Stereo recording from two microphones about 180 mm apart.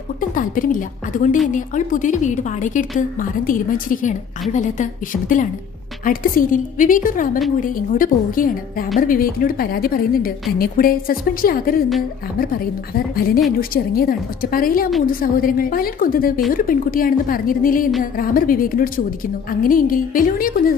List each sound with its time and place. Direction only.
0.2 s a woman's voice: 50° left (ahead or behind)